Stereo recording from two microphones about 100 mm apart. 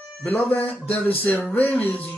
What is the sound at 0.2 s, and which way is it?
Music, 15° left (ahead or behind).